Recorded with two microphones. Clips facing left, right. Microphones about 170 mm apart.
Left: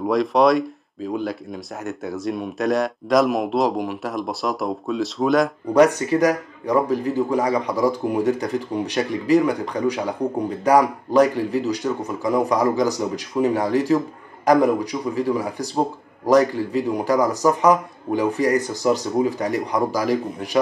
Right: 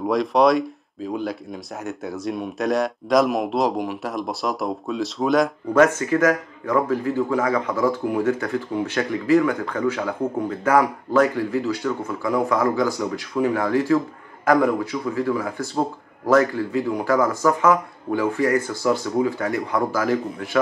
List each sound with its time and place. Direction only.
0.0 s speech: centre (ahead or behind)
5.7 s speech: 15° left (ahead or behind)